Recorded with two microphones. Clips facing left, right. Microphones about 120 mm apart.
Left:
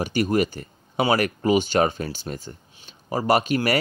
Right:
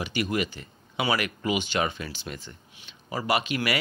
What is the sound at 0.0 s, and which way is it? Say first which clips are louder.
Speech: left 6 dB; 40° left (ahead or behind).